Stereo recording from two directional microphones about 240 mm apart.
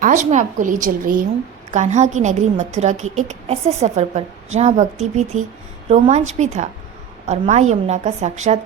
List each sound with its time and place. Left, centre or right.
0.0 s a woman's voice: right